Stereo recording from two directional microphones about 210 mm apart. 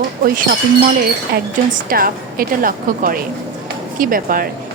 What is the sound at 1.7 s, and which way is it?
A woman's voice, 45° right (ahead or behind).